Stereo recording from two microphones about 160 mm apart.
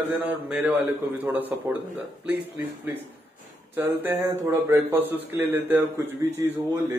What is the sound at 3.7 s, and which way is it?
Speech, 15° right (ahead or behind).